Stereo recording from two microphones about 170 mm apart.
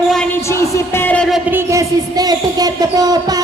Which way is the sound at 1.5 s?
15° right (ahead or behind).